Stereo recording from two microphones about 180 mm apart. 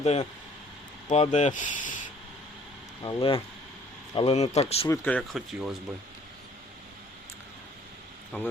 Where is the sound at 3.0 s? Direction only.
30° left (ahead or behind).